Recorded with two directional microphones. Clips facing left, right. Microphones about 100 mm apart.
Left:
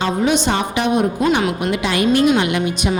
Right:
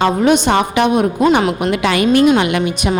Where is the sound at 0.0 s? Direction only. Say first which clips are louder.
Right 5 dB; 60° right (ahead or behind).